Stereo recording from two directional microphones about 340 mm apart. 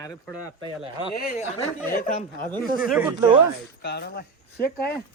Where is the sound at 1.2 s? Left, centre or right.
Left.